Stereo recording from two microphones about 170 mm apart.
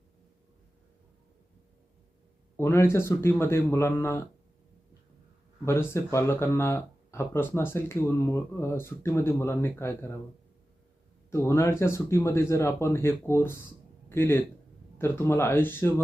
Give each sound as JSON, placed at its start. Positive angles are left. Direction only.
{"t": 2.6, "sound": "speech", "side_deg": 15}
{"t": 5.6, "sound": "speech", "side_deg": 15}
{"t": 11.3, "sound": "speech", "side_deg": 15}